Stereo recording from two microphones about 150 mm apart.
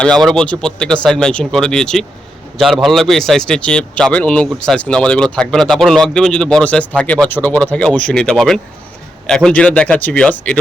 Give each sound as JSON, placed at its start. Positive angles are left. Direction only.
{"t": 0.0, "sound": "a man's voice", "side_deg": 5}